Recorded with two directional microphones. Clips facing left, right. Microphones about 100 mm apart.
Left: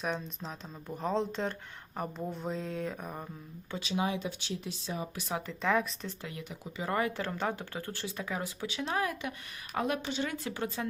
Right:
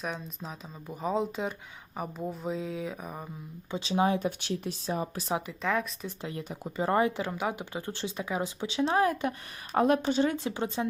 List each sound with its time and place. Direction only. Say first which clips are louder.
0.0 s speech: left 1 dB; centre (ahead or behind)
3.7 s speech: right 5 dB; 30° right (ahead or behind)
4.0 s speech: right 6 dB; 45° right (ahead or behind)
5.1 s speech: right 5 dB; 35° right (ahead or behind)
5.6 s speech: left 2 dB; centre (ahead or behind)
6.2 s speech: right 5 dB; 35° right (ahead or behind)
7.2 s speech: right 2 dB; 10° right (ahead or behind); by 10.3 s 35° right (ahead or behind)
10.3 s speech: right 4 dB; 25° right (ahead or behind)